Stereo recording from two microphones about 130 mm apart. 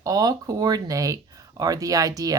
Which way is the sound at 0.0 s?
30° right (ahead or behind).